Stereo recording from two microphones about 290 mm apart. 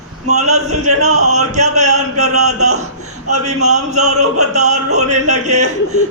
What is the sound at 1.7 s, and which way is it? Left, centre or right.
A man's voice, right.